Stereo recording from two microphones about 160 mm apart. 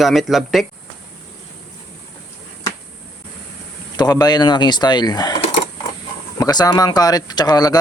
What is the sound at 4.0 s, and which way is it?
Speech, 25° left (ahead or behind).